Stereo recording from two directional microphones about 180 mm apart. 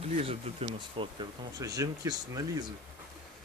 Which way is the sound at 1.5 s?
20° right (ahead or behind).